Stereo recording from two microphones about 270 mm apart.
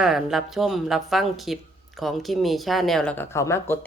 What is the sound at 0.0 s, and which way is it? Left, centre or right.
Speech, centre.